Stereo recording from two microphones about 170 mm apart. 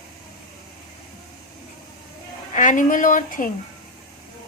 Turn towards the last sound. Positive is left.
turn(degrees=55)  # may be behind; listen again after turning